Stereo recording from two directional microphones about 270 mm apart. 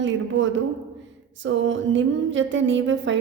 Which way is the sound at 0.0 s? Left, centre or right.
Right.